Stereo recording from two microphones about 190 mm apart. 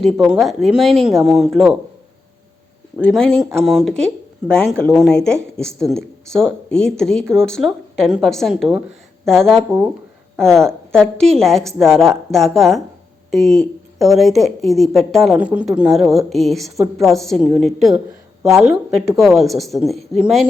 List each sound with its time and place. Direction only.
0.0 s speech: centre (ahead or behind)
3.0 s speech: 5° left (ahead or behind)
5.6 s a woman's voice: 15° right (ahead or behind)
6.0 s speech: 5° left (ahead or behind)
13.3 s speech: centre (ahead or behind)
16.7 s a woman's voice: 15° right (ahead or behind)
17.1 s speech: centre (ahead or behind)